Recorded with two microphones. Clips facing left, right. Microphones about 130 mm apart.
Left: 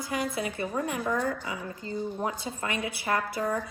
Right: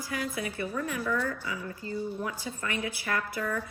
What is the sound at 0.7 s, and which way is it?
Speech, 45° left (ahead or behind).